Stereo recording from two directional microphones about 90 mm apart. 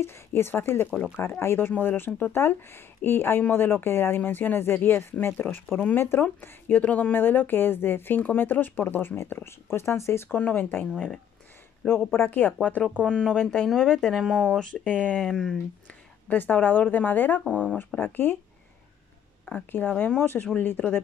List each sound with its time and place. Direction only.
0.0 s speech: 25° left (ahead or behind)
13.5 s speech: 5° left (ahead or behind)
14.6 s speech: 15° left (ahead or behind)
16.3 s speech: 15° left (ahead or behind)
19.5 s speech: 20° left (ahead or behind)